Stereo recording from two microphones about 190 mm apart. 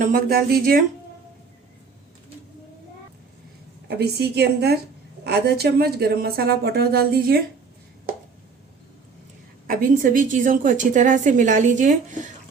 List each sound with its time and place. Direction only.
0.0 s speech: 50° right (ahead or behind)
3.8 s a woman's voice: 60° right (ahead or behind)
9.6 s a woman's voice: 45° right (ahead or behind)